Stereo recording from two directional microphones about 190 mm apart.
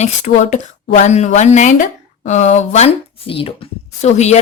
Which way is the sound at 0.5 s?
40° left (ahead or behind).